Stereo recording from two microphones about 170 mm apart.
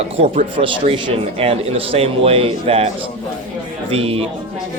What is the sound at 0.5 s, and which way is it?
Speech, 30° right (ahead or behind).